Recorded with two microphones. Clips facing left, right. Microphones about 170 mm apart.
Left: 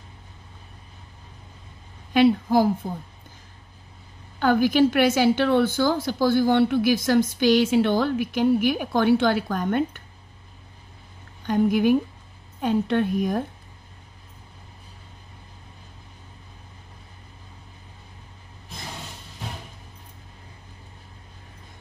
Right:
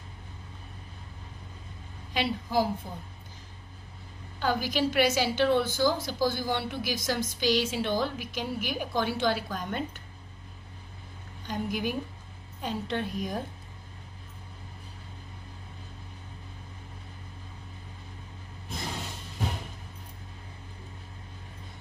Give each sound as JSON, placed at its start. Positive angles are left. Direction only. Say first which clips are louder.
{"t": 2.1, "sound": "a woman's voice", "louder": "left 10 dB", "side_deg": 55}
{"t": 4.4, "sound": "a woman's voice", "louder": "left 10 dB", "side_deg": 55}
{"t": 11.4, "sound": "a woman's voice", "louder": "left 12 dB", "side_deg": 55}